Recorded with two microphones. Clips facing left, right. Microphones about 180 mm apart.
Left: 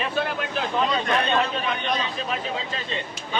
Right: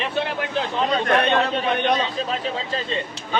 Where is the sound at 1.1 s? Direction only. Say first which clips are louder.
Right 4 dB; 65° right (ahead or behind).